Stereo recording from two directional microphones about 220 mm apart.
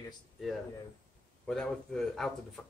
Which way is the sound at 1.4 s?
5° left (ahead or behind).